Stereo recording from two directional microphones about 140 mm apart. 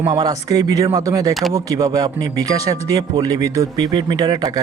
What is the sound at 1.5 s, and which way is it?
Speech, 25° right (ahead or behind).